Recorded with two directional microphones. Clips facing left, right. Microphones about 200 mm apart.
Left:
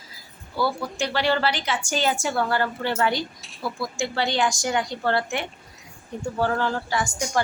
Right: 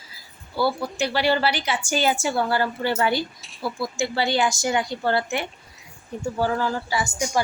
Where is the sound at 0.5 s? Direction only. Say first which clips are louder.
Right 2 dB; 5° right (ahead or behind).